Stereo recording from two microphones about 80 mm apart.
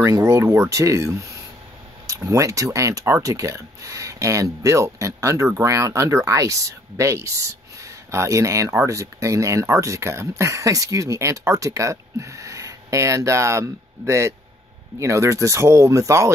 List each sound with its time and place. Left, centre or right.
0.0 s speech: right